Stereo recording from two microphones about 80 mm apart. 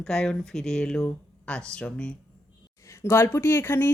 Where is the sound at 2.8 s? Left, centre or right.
Left.